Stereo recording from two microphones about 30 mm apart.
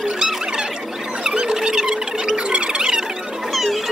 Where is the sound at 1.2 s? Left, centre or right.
Right.